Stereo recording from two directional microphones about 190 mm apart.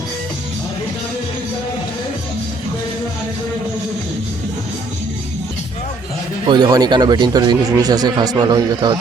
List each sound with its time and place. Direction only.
6.5 s speech: 20° right (ahead or behind)